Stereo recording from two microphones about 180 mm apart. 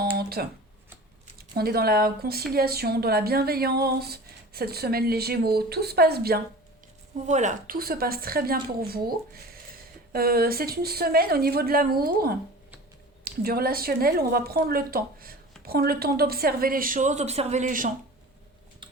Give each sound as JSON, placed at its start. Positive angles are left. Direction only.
{"t": 0.2, "sound": "a sound", "side_deg": -60}
{"t": 1.4, "sound": "speech", "side_deg": -60}
{"t": 7.3, "sound": "speech", "side_deg": -40}